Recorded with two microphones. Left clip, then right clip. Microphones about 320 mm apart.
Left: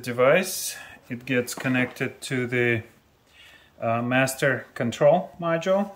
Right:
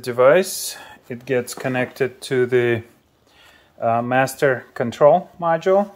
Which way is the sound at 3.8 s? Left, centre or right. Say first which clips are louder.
Right 5 dB; centre.